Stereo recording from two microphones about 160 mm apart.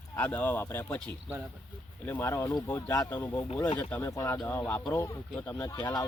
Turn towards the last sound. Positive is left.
turn(degrees=15)  # may be behind; listen again after turning